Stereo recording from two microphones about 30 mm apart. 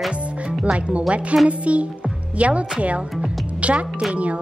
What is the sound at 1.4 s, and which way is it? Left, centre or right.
A woman's voice, right.